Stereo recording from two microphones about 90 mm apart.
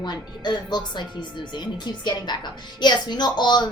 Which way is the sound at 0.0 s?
55° left (ahead or behind).